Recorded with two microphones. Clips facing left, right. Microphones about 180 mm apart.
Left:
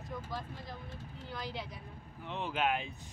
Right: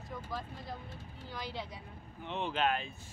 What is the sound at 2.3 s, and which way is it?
Speech, 5° left (ahead or behind).